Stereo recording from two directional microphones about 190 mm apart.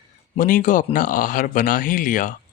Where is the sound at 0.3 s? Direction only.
45° left (ahead or behind).